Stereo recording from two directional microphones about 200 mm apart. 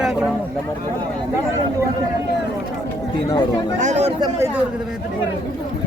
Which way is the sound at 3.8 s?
35° right (ahead or behind).